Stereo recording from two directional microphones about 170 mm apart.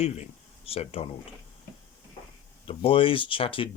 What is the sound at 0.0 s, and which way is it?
Speech, 35° left (ahead or behind).